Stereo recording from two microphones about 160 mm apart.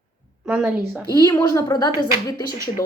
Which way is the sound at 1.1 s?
25° left (ahead or behind).